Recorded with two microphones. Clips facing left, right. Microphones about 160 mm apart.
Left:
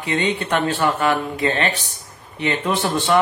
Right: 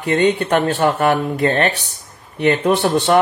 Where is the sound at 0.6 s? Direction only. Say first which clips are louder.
Right 1 dB; 55° right (ahead or behind).